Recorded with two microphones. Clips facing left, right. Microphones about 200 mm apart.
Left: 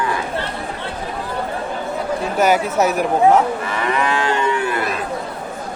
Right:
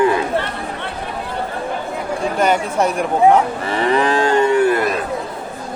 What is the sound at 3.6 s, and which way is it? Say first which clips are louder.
Moo: right 4 dB; 30° right (ahead or behind).